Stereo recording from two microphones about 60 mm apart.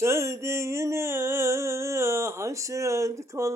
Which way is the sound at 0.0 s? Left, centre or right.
Right.